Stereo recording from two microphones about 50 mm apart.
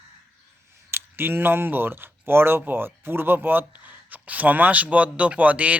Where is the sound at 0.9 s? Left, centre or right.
Right.